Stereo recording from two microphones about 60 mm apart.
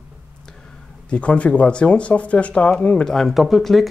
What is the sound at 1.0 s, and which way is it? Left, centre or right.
Speech, left.